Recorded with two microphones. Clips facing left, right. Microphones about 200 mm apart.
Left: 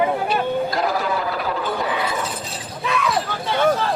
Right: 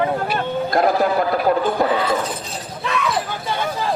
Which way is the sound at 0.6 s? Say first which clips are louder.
Right 5 dB; 50° right (ahead or behind).